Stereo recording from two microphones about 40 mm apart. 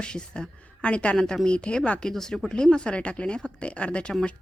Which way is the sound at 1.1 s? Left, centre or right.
Centre.